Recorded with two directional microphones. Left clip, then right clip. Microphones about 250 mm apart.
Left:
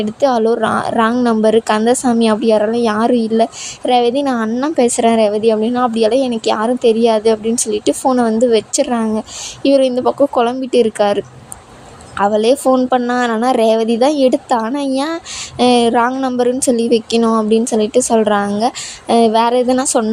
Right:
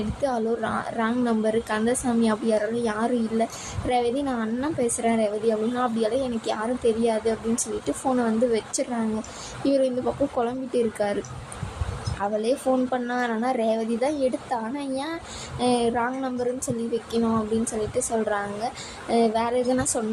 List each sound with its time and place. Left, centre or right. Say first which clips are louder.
0.2 s a woman's voice: left 13 dB; left
12.2 s a woman's voice: left 12 dB; left